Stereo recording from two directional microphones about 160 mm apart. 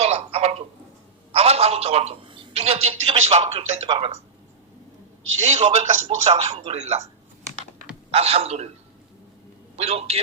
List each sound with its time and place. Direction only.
0.0 s a sound: 40° right (ahead or behind)
1.3 s a woman's voice: 40° right (ahead or behind)
5.5 s a woman's voice: 40° right (ahead or behind)
8.1 s a woman's voice: 40° right (ahead or behind)
9.7 s a woman's voice: 40° right (ahead or behind)